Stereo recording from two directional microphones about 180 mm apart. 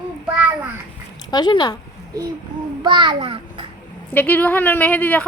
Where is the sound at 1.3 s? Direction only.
25° left (ahead or behind).